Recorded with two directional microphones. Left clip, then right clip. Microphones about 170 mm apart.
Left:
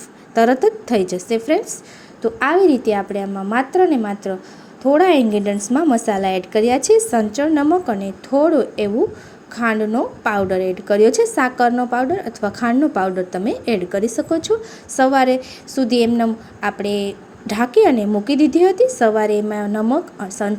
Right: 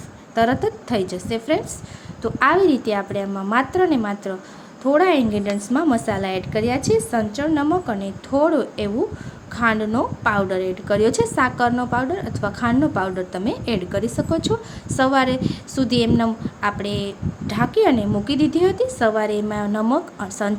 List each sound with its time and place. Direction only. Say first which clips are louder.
0.3 s a woman's voice: left 5 dB; 20° left (ahead or behind)